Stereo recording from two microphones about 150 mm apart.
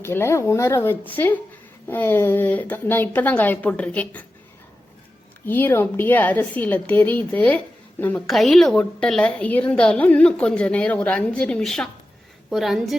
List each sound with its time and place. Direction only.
0.0 s a woman's voice: 15° left (ahead or behind)
5.5 s a woman's voice: 10° left (ahead or behind)